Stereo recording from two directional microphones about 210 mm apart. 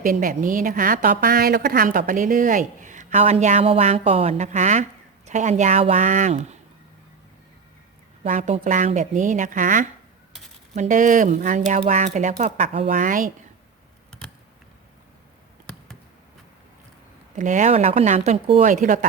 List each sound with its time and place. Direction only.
0.0 s a woman's voice: 40° right (ahead or behind)
8.2 s a woman's voice: 35° right (ahead or behind)
17.3 s a woman's voice: 35° right (ahead or behind)